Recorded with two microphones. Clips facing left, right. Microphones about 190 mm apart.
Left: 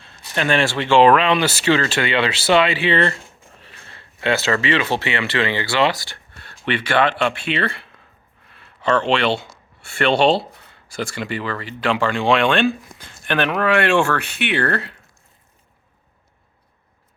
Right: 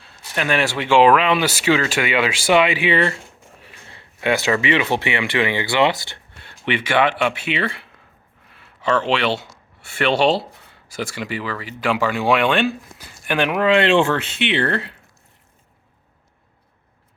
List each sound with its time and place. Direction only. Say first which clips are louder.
0.0 s speech: left 2 dB; 5° right (ahead or behind)
8.5 s a sound: left 1 dB; 10° right (ahead or behind)
11.0 s speech: left 1 dB; 10° right (ahead or behind)